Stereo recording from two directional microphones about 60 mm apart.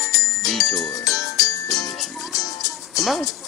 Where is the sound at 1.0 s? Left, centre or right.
Left.